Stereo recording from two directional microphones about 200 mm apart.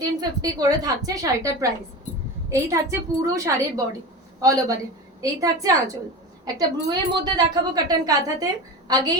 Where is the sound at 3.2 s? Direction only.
15° right (ahead or behind).